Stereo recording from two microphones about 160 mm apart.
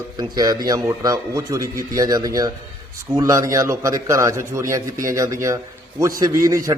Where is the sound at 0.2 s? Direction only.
25° right (ahead or behind).